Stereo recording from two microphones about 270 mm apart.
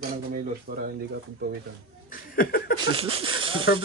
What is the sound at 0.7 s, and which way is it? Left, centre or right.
Speech, right.